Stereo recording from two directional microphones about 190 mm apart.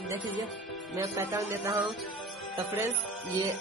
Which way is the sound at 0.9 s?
15° right (ahead or behind).